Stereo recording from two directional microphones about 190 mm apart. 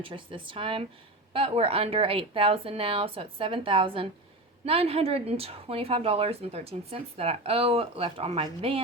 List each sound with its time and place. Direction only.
0.0 s a woman's voice: 25° right (ahead or behind)